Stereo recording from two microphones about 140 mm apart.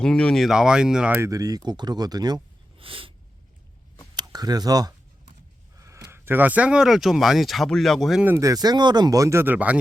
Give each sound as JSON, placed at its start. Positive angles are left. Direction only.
{"t": 0.0, "sound": "speech", "side_deg": 5}
{"t": 4.1, "sound": "speech", "side_deg": -30}
{"t": 8.2, "sound": "speech", "side_deg": -20}